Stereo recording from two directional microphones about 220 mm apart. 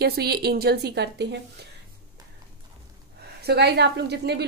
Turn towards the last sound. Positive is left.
turn(degrees=-50)  # may be behind; listen again after turning